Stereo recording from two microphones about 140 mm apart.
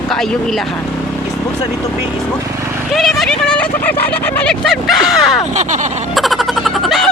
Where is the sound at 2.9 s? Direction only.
Centre (ahead or behind).